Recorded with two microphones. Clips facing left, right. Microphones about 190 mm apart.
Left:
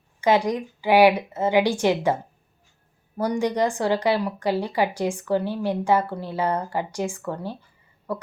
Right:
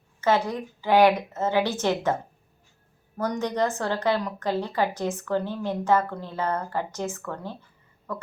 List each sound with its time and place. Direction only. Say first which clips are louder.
0.2 s speech: left 3 dB; 15° left (ahead or behind)
3.2 s speech: left 3 dB; 10° left (ahead or behind)